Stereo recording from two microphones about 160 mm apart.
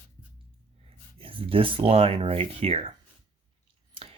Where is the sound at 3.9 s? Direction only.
35° right (ahead or behind).